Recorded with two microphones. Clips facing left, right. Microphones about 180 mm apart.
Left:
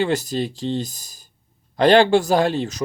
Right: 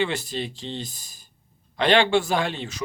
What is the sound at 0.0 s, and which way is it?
Speech, 40° left (ahead or behind).